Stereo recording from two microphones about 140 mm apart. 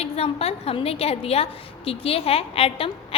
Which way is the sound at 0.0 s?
45° left (ahead or behind).